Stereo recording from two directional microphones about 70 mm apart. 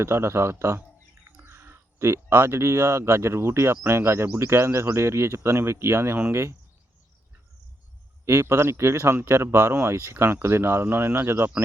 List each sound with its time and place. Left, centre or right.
0.0 s speech: right
8.2 s speech: right